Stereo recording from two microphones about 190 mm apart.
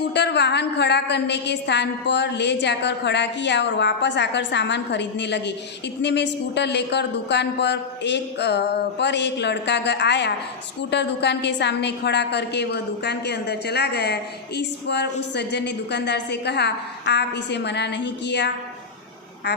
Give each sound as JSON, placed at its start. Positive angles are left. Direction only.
{"t": 0.1, "sound": "a woman's voice", "side_deg": 65}